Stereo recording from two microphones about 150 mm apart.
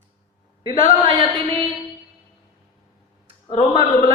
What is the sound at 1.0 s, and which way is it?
Music, 35° right (ahead or behind).